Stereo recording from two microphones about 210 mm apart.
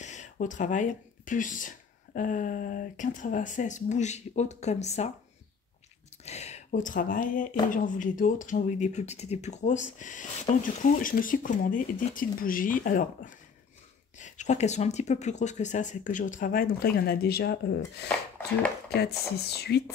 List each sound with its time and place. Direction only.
0.0 s speech: 35° left (ahead or behind)
6.2 s speech: 30° left (ahead or behind); by 19.8 s 50° left (ahead or behind)